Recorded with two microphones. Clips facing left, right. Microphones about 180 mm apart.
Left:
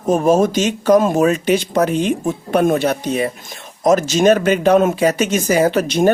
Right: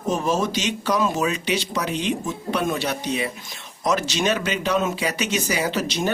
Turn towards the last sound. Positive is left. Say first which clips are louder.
# left 9 dB
turn(degrees=55)  # may be behind; listen again after turning